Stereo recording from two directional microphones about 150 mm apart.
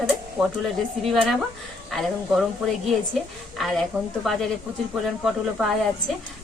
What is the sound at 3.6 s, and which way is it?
Speech, centre (ahead or behind).